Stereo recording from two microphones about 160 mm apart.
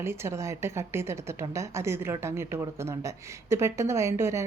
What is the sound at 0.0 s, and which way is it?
A woman's voice, 15° right (ahead or behind).